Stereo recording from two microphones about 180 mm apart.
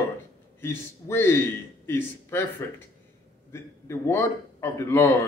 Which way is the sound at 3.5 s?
15° left (ahead or behind).